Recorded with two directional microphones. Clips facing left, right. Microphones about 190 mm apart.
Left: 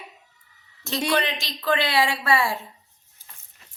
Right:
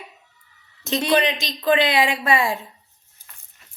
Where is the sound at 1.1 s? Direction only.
15° right (ahead or behind).